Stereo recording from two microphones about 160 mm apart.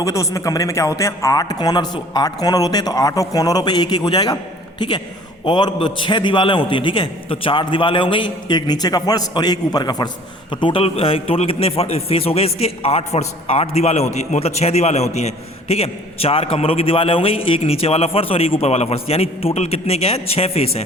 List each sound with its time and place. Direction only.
0.0 s a man's voice: 20° left (ahead or behind)
5.5 s a man's voice: 30° left (ahead or behind)